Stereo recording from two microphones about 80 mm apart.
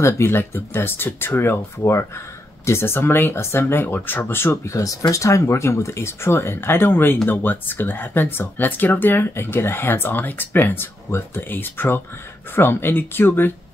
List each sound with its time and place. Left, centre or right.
0.0 s speech: left
4.7 s speech: left